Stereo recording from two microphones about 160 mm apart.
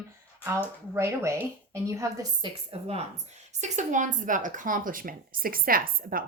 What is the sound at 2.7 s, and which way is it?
Speech, 40° right (ahead or behind).